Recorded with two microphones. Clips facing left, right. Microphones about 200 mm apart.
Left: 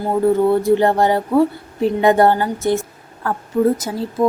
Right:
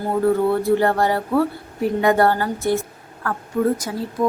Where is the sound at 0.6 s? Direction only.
20° left (ahead or behind).